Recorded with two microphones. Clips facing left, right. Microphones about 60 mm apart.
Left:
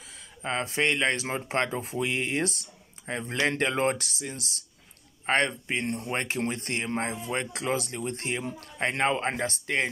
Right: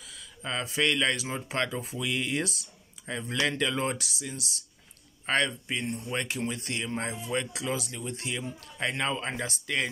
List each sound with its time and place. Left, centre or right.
0.0 s speech: left
6.1 s speech: left